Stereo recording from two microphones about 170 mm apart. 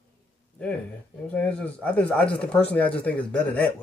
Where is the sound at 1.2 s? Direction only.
10° left (ahead or behind).